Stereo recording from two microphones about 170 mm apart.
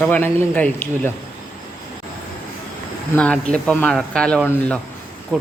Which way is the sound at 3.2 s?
5° left (ahead or behind).